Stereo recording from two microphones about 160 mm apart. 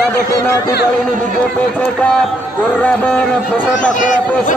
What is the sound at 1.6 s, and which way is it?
Speech, 10° left (ahead or behind).